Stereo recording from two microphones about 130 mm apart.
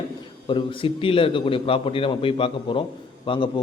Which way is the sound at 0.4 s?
40° left (ahead or behind).